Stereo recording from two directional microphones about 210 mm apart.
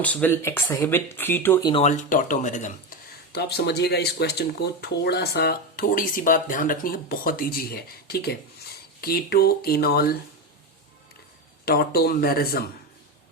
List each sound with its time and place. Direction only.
0.0 s speech: 5° left (ahead or behind)
1.7 s speech: 35° left (ahead or behind)
3.3 s speech: 50° left (ahead or behind)
11.6 s speech: 45° left (ahead or behind)